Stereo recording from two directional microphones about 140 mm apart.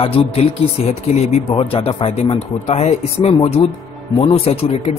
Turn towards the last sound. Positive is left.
turn(degrees=45)  # may be behind; listen again after turning